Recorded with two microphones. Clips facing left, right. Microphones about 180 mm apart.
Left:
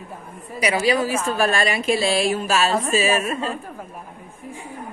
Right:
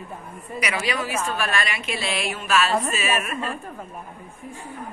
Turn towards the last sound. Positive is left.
turn(degrees=25)  # may be behind; listen again after turning